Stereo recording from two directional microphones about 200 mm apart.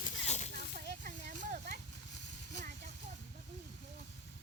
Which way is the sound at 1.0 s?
40° right (ahead or behind).